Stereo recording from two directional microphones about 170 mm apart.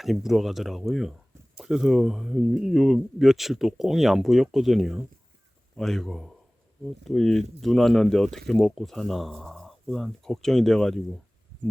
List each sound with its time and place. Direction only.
0.0 s speech: centre (ahead or behind)